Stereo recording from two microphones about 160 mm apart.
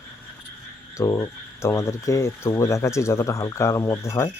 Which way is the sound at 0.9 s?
20° left (ahead or behind).